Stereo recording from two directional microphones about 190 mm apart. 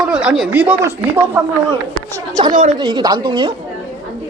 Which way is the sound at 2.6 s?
25° right (ahead or behind).